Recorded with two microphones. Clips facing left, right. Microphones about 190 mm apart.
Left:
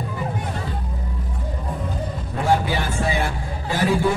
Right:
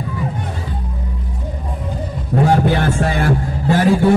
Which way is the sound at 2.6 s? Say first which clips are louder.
Right 7 dB; 60° right (ahead or behind).